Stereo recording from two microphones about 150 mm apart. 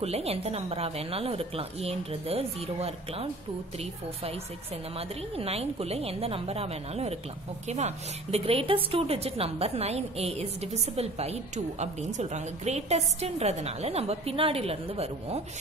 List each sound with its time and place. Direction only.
0.0 s a woman's voice: 45° right (ahead or behind)
4.9 s a woman's voice: 40° right (ahead or behind)